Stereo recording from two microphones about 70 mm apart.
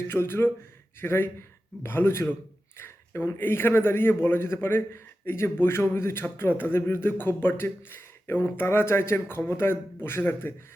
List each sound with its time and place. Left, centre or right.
0.1 s a man's voice: left